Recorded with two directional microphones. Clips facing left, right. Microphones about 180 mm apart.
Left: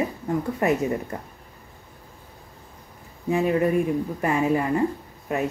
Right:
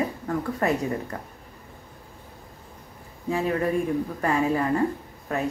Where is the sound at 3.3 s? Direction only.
20° left (ahead or behind).